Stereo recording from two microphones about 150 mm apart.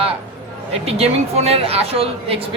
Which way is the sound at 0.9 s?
45° right (ahead or behind).